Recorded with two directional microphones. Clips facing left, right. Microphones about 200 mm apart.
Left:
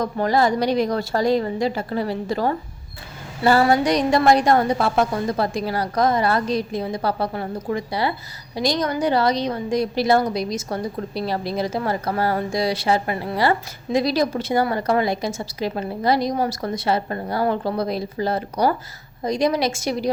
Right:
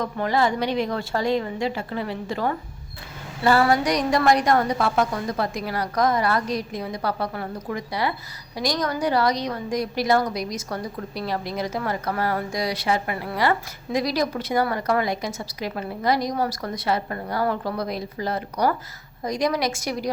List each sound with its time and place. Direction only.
0.0 s a woman's voice: 40° left (ahead or behind)